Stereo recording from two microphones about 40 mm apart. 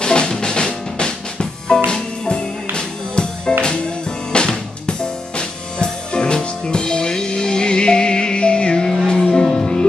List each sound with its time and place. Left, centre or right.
0.0 s drum: left
0.4 s music: centre